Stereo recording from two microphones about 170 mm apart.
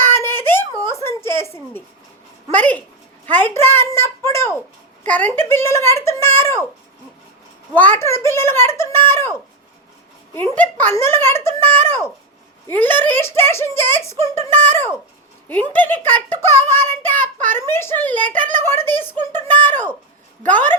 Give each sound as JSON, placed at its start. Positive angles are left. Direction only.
{"t": 0.0, "sound": "a sound", "side_deg": 15}
{"t": 2.5, "sound": "a child's voice", "side_deg": 10}
{"t": 7.8, "sound": "a child's voice", "side_deg": 15}